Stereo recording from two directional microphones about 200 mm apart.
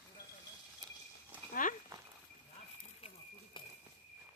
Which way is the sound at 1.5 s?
40° left (ahead or behind).